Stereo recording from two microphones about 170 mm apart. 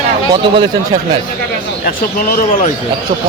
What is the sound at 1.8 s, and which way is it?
Speech, 55° left (ahead or behind).